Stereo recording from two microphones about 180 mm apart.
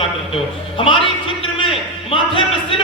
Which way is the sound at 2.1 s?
30° left (ahead or behind).